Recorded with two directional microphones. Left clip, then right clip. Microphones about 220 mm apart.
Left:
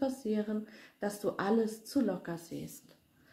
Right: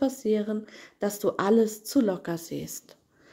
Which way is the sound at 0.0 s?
45° right (ahead or behind).